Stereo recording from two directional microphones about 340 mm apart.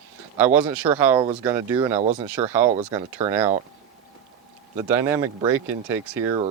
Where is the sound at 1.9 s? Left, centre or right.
Centre.